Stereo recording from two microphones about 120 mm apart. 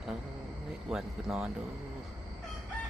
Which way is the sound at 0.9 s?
5° right (ahead or behind).